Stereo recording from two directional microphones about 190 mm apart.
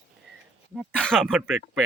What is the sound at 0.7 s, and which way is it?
Speech, 5° left (ahead or behind).